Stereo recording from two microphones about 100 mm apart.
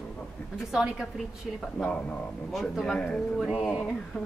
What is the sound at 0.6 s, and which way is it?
Speech, 5° right (ahead or behind).